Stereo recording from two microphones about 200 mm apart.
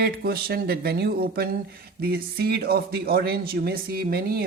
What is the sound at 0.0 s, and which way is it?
Speech, 50° right (ahead or behind).